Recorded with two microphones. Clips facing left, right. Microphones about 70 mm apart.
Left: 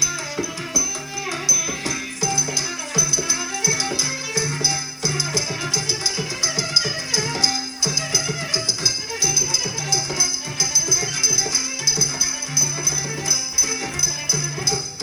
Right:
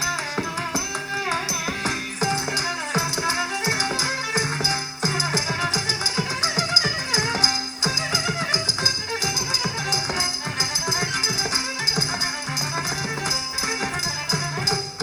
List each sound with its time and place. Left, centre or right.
0.0 s music: right